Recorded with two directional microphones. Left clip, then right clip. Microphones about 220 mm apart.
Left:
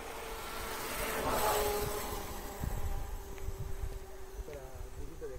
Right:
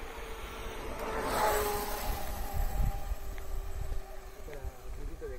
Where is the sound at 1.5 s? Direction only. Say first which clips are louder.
Right 1 dB; 45° right (ahead or behind).